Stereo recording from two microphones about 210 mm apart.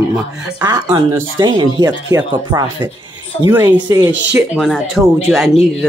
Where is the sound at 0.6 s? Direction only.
20° right (ahead or behind).